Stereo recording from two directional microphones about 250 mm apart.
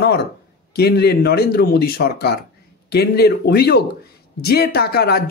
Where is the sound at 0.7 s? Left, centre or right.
Left.